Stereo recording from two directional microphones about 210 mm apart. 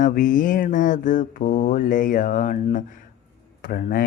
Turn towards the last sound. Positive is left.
turn(degrees=40)  # may be behind; listen again after turning